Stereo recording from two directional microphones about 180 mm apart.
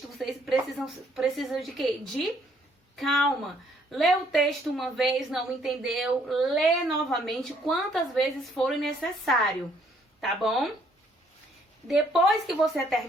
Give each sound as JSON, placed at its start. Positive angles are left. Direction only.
{"t": 0.2, "sound": "a woman's voice", "side_deg": 0}
{"t": 11.9, "sound": "a woman's voice", "side_deg": -5}